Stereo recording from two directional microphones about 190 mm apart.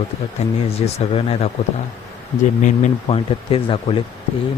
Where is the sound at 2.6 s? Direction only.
35° left (ahead or behind).